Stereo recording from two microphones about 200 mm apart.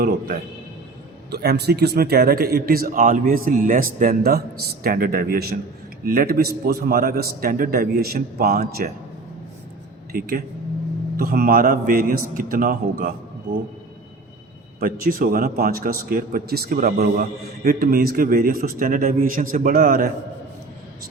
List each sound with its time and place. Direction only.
1.3 s a man's voice: 55° right (ahead or behind)
10.1 s a man's voice: 50° right (ahead or behind)
14.8 s a man's voice: 45° right (ahead or behind)